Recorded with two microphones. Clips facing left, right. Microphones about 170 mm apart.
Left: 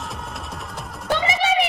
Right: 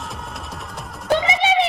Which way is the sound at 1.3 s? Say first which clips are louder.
Right 2 dB; 20° right (ahead or behind).